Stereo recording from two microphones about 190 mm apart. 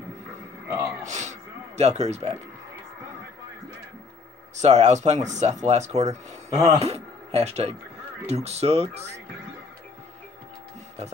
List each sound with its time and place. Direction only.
0.7 s gasp: 15° right (ahead or behind)
1.0 s music: 40° right (ahead or behind)
1.8 s speech: 35° right (ahead or behind)
4.6 s speech: 35° right (ahead or behind)